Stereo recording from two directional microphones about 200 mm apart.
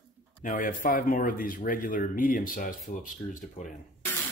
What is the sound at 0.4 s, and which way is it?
Speech, 40° left (ahead or behind).